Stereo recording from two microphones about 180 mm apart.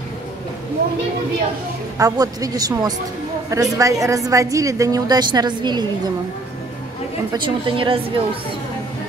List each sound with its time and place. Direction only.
2.0 s a woman's voice: 20° right (ahead or behind)
7.3 s speech: 30° right (ahead or behind)